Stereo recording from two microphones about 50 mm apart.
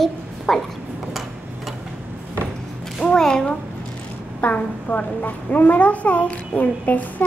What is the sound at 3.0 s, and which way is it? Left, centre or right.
Speech, centre.